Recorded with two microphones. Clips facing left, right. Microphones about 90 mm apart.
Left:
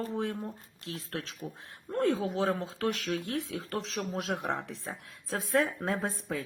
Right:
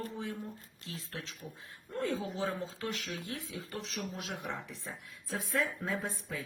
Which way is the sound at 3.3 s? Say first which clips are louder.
Left 7 dB; 80° left.